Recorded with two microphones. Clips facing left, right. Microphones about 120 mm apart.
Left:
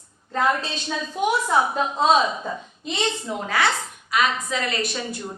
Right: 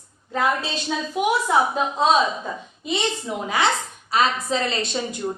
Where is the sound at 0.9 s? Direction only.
5° right (ahead or behind).